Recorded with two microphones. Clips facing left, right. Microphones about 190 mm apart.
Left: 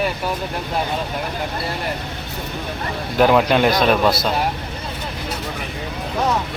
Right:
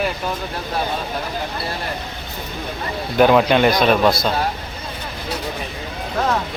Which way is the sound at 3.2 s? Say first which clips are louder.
Right 1 dB; centre (ahead or behind).